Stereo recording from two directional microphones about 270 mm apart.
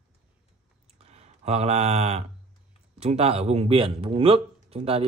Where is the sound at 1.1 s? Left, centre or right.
Right.